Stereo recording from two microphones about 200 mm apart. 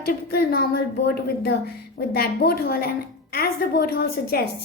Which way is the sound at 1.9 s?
50° left (ahead or behind).